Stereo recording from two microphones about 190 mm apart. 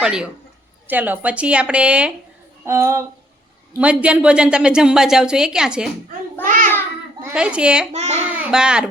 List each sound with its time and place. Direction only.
0.0 s a woman's voice: 5° right (ahead or behind)
6.4 s a child's voice: 45° right (ahead or behind)
7.2 s a woman's voice: 10° right (ahead or behind)